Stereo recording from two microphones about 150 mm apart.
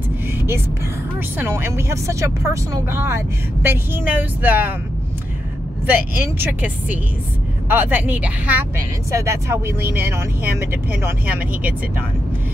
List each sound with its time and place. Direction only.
1.4 s speech: 15° right (ahead or behind)
5.9 s speech: 15° right (ahead or behind)